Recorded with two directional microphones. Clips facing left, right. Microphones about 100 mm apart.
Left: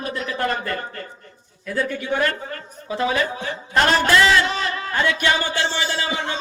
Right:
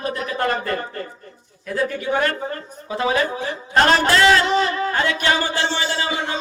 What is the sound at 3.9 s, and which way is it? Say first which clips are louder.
A man's voice: right 1 dB; 35° right (ahead or behind).